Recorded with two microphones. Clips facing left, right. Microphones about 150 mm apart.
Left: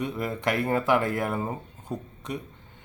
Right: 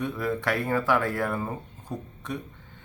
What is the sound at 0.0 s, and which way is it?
Speech, 15° left (ahead or behind).